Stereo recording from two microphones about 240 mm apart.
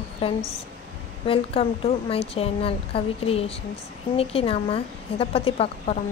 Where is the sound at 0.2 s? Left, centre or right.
Left.